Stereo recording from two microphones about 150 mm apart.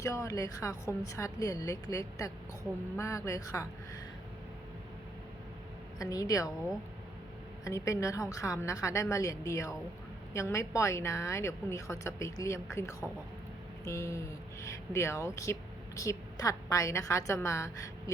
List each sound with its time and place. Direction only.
0.0 s a woman's voice: 20° left (ahead or behind)
6.0 s a woman's voice: 25° left (ahead or behind)
7.6 s a woman's voice: 20° left (ahead or behind)